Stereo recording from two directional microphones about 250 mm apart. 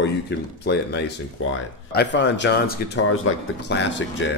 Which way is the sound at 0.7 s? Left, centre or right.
Left.